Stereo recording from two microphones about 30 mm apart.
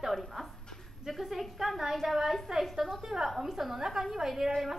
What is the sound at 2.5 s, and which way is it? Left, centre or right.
A woman's voice, centre.